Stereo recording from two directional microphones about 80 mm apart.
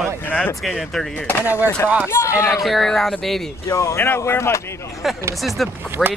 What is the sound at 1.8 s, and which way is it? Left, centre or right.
Speech, right.